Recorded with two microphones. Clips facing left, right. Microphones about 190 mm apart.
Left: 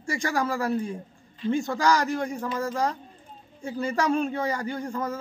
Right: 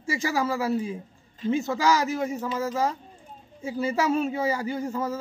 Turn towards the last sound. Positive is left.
turn(degrees=-5)  # may be behind; listen again after turning